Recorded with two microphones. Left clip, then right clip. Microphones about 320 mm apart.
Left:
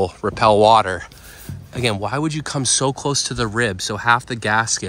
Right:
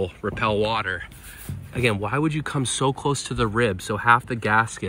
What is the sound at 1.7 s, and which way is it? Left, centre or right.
Speech, centre.